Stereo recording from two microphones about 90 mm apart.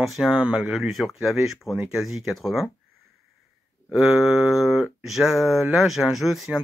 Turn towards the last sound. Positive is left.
turn(degrees=0)  # may be behind; listen again after turning